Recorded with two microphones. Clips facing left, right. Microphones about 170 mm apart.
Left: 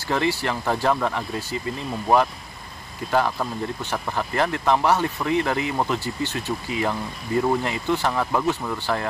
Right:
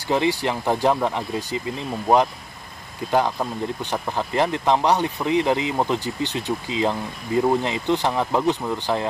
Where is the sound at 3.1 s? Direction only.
15° right (ahead or behind).